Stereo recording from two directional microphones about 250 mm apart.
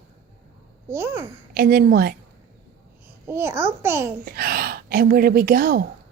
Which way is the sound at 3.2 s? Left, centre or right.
Centre.